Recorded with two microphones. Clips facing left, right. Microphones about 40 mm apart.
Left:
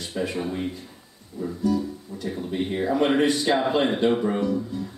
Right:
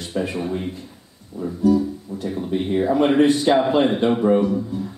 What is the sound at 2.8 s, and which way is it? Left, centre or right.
Speech, centre.